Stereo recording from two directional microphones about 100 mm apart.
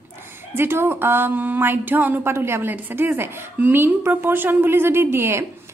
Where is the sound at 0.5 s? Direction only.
25° right (ahead or behind).